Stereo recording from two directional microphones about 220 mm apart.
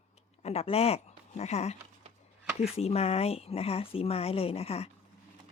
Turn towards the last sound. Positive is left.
turn(degrees=25)  # may be behind; listen again after turning